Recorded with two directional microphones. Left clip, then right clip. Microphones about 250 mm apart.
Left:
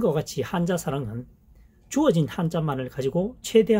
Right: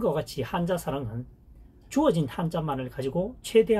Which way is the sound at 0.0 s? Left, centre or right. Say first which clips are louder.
Left 3 dB; left.